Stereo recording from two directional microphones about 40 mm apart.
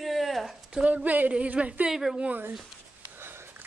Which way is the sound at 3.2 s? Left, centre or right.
Right.